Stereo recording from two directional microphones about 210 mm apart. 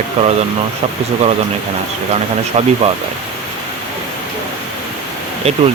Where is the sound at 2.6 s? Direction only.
30° right (ahead or behind).